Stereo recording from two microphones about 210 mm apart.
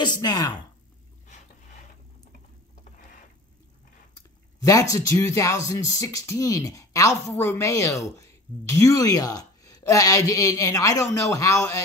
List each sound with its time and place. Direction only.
0.0 s a woman's voice: 20° left (ahead or behind)
4.6 s speech: 15° left (ahead or behind)